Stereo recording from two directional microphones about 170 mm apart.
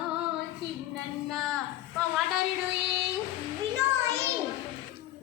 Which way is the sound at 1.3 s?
Centre (ahead or behind).